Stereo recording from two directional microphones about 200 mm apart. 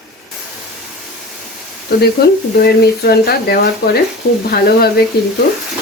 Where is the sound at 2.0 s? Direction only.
50° left (ahead or behind).